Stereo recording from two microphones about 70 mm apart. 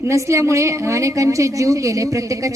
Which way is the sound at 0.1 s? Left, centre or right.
Right.